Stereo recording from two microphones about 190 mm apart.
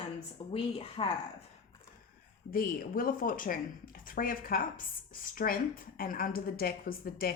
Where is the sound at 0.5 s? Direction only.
30° left (ahead or behind).